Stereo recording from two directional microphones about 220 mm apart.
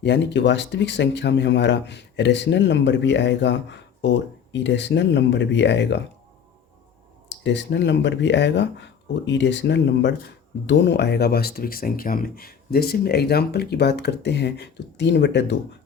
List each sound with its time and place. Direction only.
0.0 s speech: 50° left (ahead or behind)
7.3 s speech: 55° left (ahead or behind)